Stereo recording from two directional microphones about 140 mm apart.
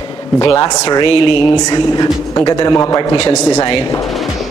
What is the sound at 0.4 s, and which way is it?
A man's voice, 25° left (ahead or behind).